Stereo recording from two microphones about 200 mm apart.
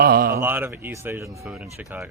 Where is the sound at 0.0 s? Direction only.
50° right (ahead or behind).